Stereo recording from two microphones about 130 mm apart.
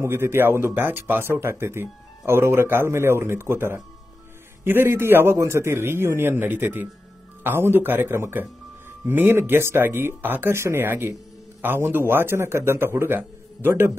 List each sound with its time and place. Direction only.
0.0 s speech: 20° right (ahead or behind)